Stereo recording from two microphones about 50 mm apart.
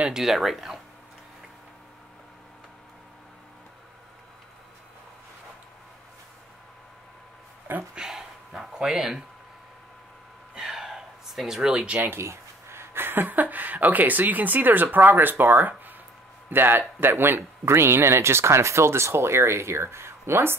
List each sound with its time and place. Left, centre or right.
0.1 s speech: centre
7.9 s a sound: centre
10.5 s gasp: centre
12.1 s speech: right
17.6 s speech: right